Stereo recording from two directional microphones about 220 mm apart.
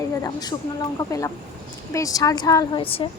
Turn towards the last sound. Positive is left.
turn(degrees=25)  # may be behind; listen again after turning